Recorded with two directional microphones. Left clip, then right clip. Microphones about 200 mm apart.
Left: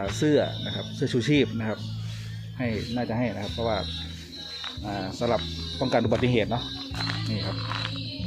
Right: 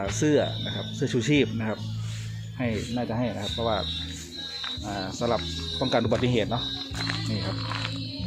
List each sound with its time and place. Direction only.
0.0 s speech: 10° left (ahead or behind)
2.6 s speech: centre (ahead or behind)
4.9 s speech: 20° left (ahead or behind)
7.0 s speech: centre (ahead or behind)